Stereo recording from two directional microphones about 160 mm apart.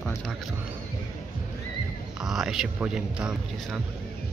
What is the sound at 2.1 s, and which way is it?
Speech, centre (ahead or behind).